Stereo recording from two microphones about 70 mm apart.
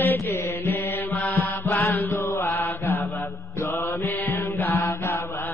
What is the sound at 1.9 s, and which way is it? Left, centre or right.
Chant, left.